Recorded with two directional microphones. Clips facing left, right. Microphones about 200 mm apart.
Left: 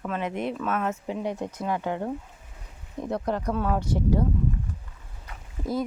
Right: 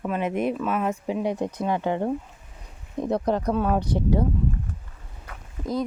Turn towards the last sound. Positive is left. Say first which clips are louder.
# right 1 dB
turn(degrees=5)  # may be behind; listen again after turning